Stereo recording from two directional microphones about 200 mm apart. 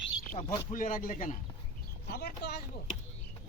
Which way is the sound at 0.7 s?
40° left (ahead or behind).